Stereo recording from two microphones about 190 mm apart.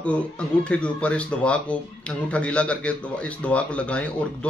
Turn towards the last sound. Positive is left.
turn(degrees=5)  # may be behind; listen again after turning